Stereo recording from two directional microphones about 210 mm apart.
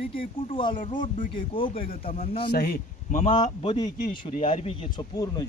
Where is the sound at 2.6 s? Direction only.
45° left (ahead or behind).